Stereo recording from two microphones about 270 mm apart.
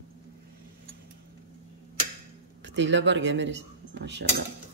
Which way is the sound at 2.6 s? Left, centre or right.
Right.